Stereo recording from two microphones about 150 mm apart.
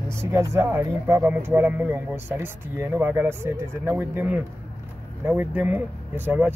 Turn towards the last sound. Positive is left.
turn(degrees=-10)  # may be behind; listen again after turning